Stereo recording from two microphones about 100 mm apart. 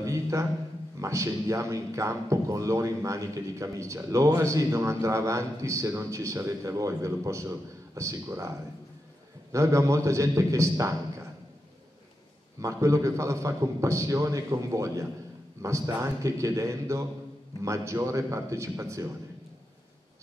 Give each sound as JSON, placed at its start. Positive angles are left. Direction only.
{"t": 0.0, "sound": "a sound", "side_deg": -30}
{"t": 0.9, "sound": "a man's voice", "side_deg": -30}
{"t": 12.5, "sound": "a man's voice", "side_deg": -30}